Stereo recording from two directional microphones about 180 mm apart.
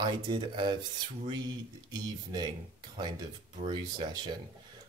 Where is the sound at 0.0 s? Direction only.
25° right (ahead or behind).